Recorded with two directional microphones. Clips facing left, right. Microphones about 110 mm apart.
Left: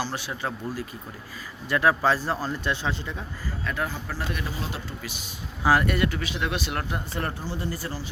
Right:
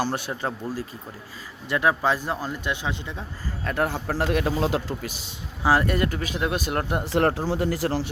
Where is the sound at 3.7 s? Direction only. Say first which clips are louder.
Right 6 dB; 60° right (ahead or behind); by 4.9 s 90° right.